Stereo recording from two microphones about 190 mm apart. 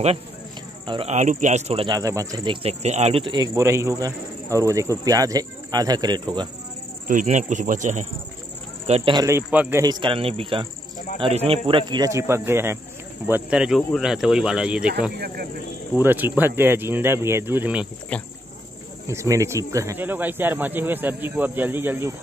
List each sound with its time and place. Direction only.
0.8 s speech: 25° right (ahead or behind)
1.1 s speech: 40° right (ahead or behind)
2.0 s speech: 15° right (ahead or behind)
7.1 s speech: 40° right (ahead or behind)
9.1 s speech: 15° right (ahead or behind)
15.1 s speech: 55° right (ahead or behind)
16.0 s speech: 10° right (ahead or behind)
18.1 s speech: 5° left (ahead or behind)
19.0 s speech: 15° right (ahead or behind)